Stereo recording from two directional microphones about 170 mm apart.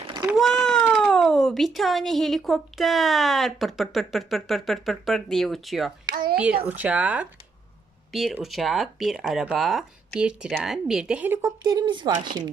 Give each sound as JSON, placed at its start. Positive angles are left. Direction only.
{"t": 0.3, "sound": "speech", "side_deg": 5}
{"t": 11.4, "sound": "speech", "side_deg": -20}